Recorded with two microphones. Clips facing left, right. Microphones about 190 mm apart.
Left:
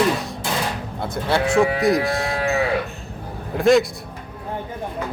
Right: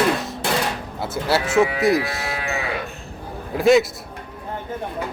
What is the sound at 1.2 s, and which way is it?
Speech, 5° right (ahead or behind).